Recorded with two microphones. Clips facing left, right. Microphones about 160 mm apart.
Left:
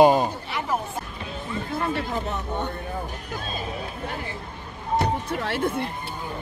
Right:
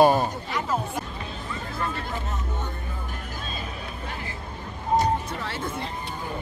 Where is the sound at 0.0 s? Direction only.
15° left (ahead or behind).